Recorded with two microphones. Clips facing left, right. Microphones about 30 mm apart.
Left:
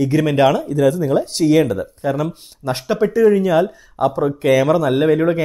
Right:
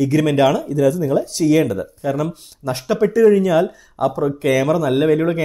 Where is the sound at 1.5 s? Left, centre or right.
Centre.